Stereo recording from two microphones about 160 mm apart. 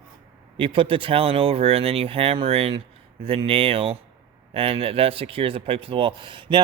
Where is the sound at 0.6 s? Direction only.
35° right (ahead or behind).